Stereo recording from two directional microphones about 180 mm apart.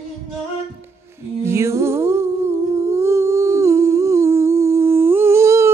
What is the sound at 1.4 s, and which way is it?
Humming, 15° right (ahead or behind).